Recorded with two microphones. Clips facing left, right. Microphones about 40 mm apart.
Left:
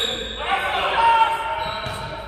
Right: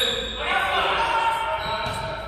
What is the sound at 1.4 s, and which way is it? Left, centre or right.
Basketball bounce, centre.